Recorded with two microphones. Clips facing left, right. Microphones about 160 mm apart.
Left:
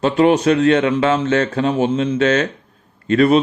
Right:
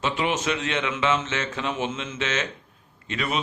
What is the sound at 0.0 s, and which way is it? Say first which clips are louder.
Speech: left 12 dB; 40° left (ahead or behind).